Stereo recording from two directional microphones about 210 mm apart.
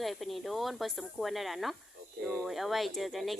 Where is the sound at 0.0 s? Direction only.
Centre (ahead or behind).